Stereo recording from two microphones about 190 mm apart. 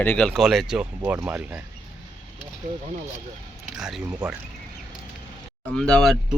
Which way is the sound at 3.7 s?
5° right (ahead or behind).